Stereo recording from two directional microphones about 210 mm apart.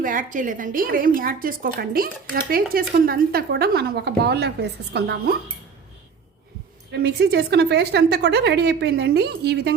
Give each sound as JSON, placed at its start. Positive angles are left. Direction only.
{"t": 0.0, "sound": "a woman's voice", "side_deg": -40}
{"t": 6.9, "sound": "a woman's voice", "side_deg": -50}